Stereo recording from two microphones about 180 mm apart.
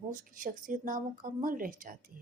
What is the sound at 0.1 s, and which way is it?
Speech, 50° right (ahead or behind).